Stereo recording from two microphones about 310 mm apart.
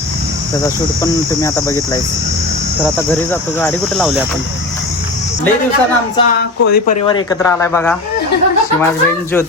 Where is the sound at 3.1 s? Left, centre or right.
Centre.